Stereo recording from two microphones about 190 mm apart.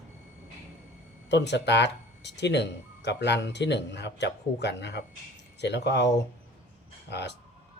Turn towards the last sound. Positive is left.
turn(degrees=65)  # may be behind; listen again after turning